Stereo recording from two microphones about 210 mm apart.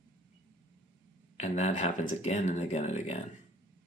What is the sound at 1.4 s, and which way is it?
Speech, 35° left (ahead or behind).